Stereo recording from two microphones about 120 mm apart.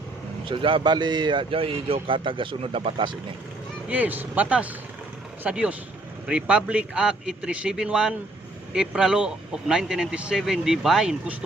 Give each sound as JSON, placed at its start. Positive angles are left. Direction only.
{"t": 0.4, "sound": "a man's voice", "side_deg": -45}
{"t": 3.8, "sound": "a man's voice", "side_deg": -15}